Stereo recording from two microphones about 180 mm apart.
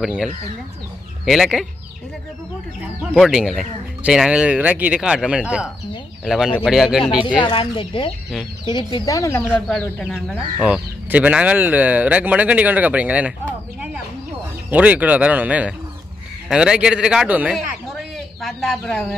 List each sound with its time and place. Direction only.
0.0 s speech: centre (ahead or behind)
2.8 s speech: 5° right (ahead or behind)
7.3 s speech: 30° left (ahead or behind)
9.4 s speech: centre (ahead or behind)
10.6 s speech: 5° right (ahead or behind)
14.7 s speech: 10° right (ahead or behind)